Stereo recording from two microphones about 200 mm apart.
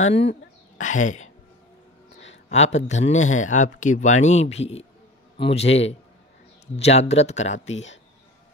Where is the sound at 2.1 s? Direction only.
65° left (ahead or behind).